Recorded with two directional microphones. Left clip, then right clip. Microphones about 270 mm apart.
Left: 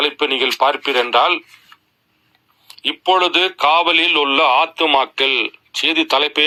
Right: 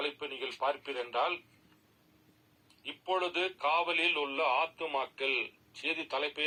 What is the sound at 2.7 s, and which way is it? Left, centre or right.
A man's voice, left.